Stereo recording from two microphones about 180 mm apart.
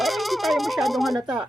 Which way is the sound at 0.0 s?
Centre (ahead or behind).